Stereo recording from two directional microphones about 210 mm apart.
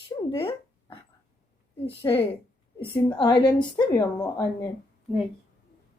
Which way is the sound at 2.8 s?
20° left (ahead or behind).